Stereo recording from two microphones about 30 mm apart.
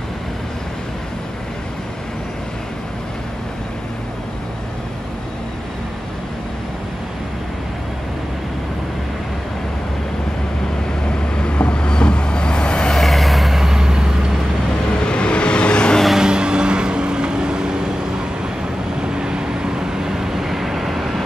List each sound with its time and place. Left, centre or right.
11.1 s vehicle: left
12.9 s vehicle: centre
15.0 s vehicle: left
16.2 s vehicle: right
18.9 s vehicle: right; by 21.1 s centre